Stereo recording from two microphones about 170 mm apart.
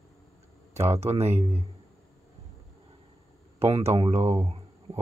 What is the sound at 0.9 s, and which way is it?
Speech, 35° right (ahead or behind).